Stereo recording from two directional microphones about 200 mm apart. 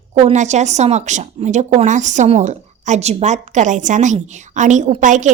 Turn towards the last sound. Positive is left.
turn(degrees=-40)  # may be behind; listen again after turning